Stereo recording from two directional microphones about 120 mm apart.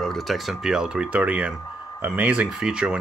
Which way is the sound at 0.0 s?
Centre (ahead or behind).